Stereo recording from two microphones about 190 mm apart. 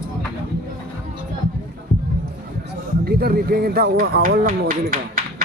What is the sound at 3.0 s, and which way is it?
Speech, 55° right (ahead or behind).